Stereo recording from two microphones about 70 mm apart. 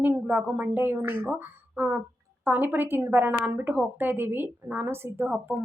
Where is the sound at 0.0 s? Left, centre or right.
Right.